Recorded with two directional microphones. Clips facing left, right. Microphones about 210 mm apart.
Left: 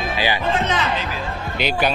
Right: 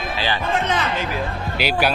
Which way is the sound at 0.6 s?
55° right (ahead or behind).